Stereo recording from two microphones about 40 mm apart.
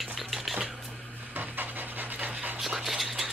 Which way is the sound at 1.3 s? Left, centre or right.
Right.